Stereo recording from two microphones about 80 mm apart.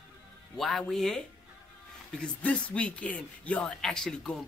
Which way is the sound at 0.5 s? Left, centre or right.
Centre.